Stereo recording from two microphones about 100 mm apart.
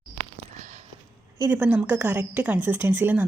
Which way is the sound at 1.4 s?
20° right (ahead or behind).